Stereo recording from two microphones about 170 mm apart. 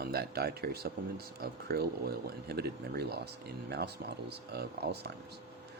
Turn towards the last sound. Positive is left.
turn(degrees=-70)  # may be behind; listen again after turning